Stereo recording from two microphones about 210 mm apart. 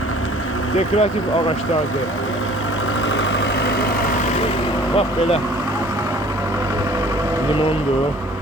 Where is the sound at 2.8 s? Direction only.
60° left (ahead or behind).